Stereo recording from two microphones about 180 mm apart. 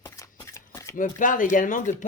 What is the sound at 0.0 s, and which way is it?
Shuffling cards, 20° left (ahead or behind).